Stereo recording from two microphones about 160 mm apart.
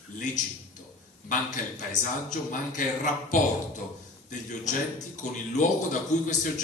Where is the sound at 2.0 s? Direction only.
50° left (ahead or behind).